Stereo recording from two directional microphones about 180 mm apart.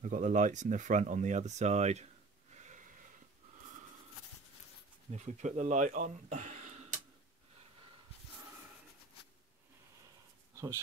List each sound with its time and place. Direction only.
0.0 s speech: 45° right (ahead or behind)
2.5 s a sound: 40° right (ahead or behind)
5.1 s speech: 40° right (ahead or behind)